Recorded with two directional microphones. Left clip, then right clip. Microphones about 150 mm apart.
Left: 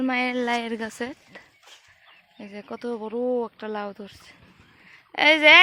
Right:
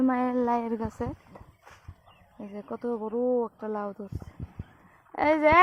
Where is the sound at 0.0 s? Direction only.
15° left (ahead or behind).